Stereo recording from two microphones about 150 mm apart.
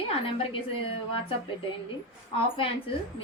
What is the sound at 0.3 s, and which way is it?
Speech, 40° left (ahead or behind).